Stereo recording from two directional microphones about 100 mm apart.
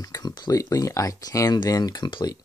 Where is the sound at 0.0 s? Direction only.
40° left (ahead or behind).